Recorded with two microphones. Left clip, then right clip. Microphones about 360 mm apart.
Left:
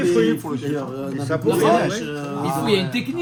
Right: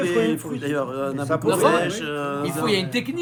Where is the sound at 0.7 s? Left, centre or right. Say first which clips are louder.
Right 6 dB; right.